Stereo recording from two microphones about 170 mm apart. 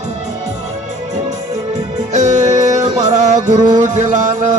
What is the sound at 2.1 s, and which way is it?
Music, 45° right (ahead or behind).